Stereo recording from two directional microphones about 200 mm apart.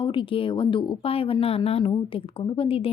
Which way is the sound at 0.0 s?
25° left (ahead or behind).